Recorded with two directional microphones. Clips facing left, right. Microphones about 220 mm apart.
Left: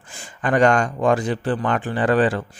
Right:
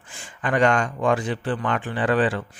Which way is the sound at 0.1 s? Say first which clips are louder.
Left 4 dB; 40° left (ahead or behind).